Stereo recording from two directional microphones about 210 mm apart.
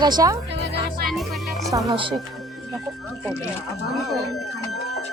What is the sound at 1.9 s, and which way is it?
Speech, 25° right (ahead or behind).